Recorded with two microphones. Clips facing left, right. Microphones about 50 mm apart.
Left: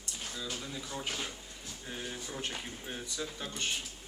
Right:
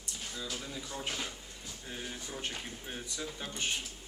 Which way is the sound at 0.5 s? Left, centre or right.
Centre.